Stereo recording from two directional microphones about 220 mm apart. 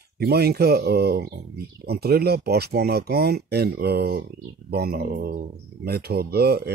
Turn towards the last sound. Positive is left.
turn(degrees=-45)  # may be behind; listen again after turning